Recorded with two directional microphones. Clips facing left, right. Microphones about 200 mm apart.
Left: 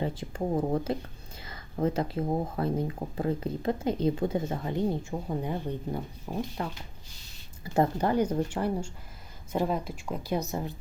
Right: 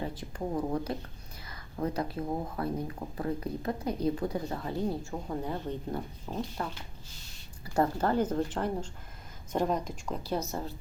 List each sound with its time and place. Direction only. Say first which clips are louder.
0.0 s speech: left 4 dB; 25° left (ahead or behind)